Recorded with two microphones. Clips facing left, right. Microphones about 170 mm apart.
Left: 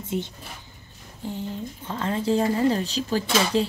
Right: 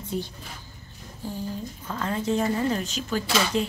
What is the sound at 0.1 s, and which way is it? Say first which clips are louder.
A woman's voice: left 2 dB; 20° left (ahead or behind).